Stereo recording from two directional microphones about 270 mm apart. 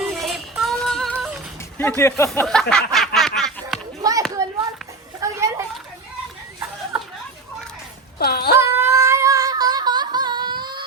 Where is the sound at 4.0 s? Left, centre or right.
Centre.